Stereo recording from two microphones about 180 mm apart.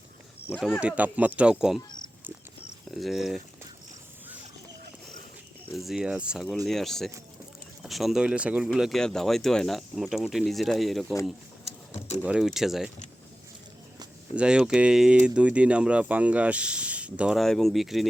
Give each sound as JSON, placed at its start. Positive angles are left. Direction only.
{"t": 0.8, "sound": "speech", "side_deg": -5}
{"t": 2.9, "sound": "speech", "side_deg": 0}
{"t": 5.6, "sound": "speech", "side_deg": 0}
{"t": 11.6, "sound": "a sound", "side_deg": 35}
{"t": 12.2, "sound": "speech", "side_deg": -5}
{"t": 14.3, "sound": "speech", "side_deg": -5}